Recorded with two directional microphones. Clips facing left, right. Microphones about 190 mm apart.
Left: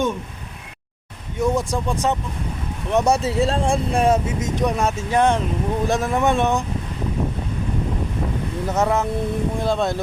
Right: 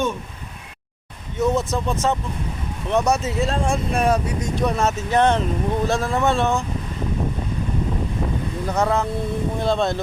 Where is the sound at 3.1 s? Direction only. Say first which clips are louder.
Left 2 dB; 30° left (ahead or behind).